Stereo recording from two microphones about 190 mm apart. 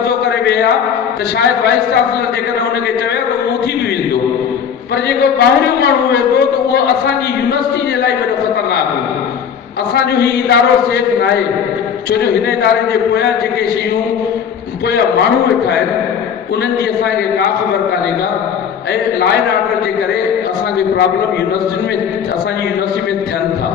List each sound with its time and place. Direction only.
0.3 s a sound: 60° left (ahead or behind)
5.0 s a man's voice: 60° left (ahead or behind)
9.9 s a man's voice: 60° left (ahead or behind)